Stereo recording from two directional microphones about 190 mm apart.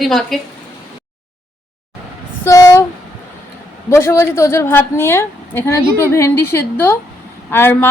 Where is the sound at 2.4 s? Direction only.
15° left (ahead or behind).